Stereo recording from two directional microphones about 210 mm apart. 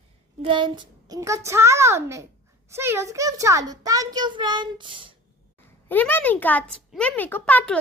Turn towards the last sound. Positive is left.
turn(degrees=5)  # may be behind; listen again after turning